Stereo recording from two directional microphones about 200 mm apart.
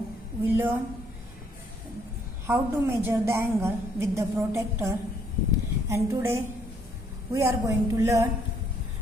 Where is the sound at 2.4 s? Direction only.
15° right (ahead or behind).